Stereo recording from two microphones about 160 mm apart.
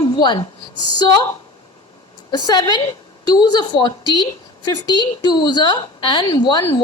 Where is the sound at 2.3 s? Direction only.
25° left (ahead or behind).